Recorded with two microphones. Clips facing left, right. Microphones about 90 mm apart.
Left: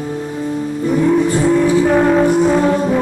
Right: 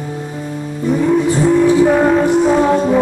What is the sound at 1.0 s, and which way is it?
Music, centre (ahead or behind).